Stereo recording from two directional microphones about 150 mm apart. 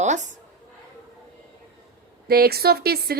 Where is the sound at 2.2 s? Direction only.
90° right.